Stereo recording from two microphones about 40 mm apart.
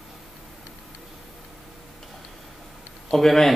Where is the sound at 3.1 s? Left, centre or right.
Centre.